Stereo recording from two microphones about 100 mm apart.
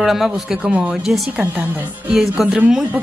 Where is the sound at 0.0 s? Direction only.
Centre (ahead or behind).